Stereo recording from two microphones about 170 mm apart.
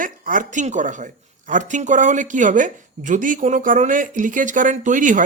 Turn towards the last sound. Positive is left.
turn(degrees=-50)  # may be behind; listen again after turning